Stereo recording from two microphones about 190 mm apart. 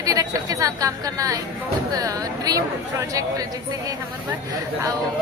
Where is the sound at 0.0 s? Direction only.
20° right (ahead or behind).